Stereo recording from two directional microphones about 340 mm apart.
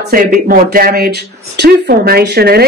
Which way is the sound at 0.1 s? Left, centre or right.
Right.